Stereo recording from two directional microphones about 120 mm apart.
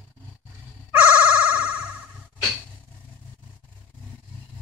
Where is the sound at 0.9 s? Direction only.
15° right (ahead or behind).